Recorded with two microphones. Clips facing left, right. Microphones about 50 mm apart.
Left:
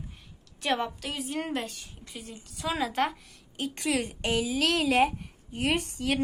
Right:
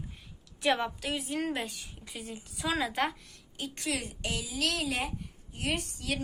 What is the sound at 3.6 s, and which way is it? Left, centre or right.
A woman's voice, left.